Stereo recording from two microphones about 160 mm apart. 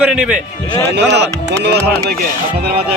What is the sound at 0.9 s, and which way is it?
Speech, 90° right.